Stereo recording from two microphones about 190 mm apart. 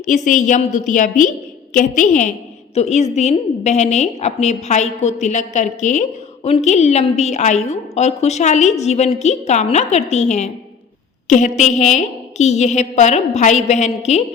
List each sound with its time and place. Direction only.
0.0 s a woman's voice: 40° left (ahead or behind)